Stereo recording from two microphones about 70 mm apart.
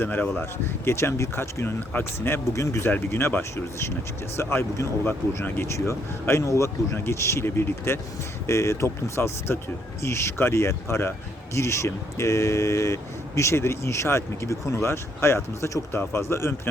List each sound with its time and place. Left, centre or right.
0.0 s speech: left
0.9 s speech: left
2.5 s speech: left